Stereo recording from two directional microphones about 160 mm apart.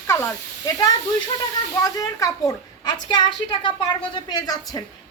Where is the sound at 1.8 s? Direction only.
20° left (ahead or behind).